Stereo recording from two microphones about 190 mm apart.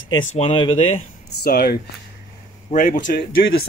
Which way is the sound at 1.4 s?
55° left (ahead or behind).